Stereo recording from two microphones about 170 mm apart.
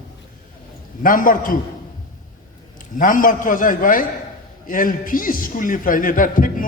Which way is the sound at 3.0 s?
50° left (ahead or behind).